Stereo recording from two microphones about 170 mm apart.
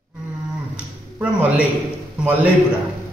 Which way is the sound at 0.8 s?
10° right (ahead or behind).